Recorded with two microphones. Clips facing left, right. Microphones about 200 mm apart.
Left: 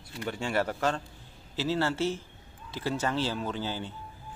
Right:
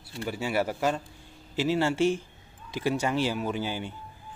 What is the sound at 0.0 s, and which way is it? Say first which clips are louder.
A man's voice: right 2 dB; 5° right (ahead or behind).